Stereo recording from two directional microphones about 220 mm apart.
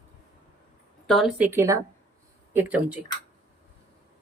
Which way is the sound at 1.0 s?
Centre (ahead or behind).